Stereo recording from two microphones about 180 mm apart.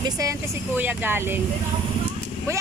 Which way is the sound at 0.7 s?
10° right (ahead or behind).